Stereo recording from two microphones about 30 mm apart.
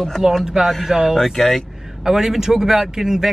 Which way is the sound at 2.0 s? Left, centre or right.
Centre.